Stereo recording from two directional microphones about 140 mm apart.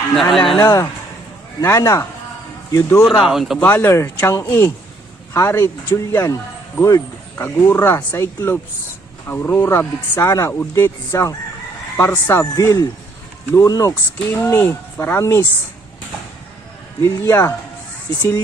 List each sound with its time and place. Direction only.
0.2 s speech: centre (ahead or behind)
0.6 s speech: 25° left (ahead or behind)
3.1 s speech: centre (ahead or behind)
3.6 s speech: 15° left (ahead or behind)
17.0 s speech: 20° left (ahead or behind)